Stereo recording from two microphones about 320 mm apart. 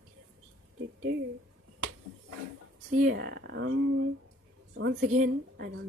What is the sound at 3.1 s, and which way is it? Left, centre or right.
A woman's voice, right.